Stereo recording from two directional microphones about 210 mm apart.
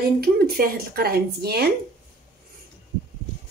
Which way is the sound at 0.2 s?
45° right (ahead or behind).